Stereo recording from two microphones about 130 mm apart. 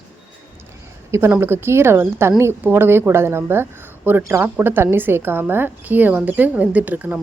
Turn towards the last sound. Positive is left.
turn(degrees=-10)  # may be behind; listen again after turning